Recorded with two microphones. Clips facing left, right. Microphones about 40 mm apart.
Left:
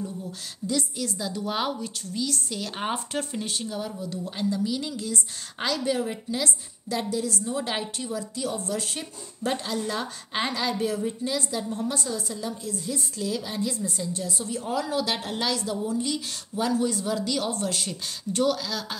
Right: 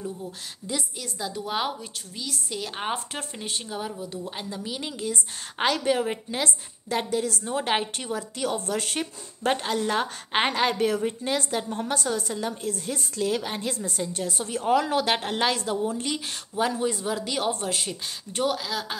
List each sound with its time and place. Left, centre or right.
0.9 s a woman's voice: centre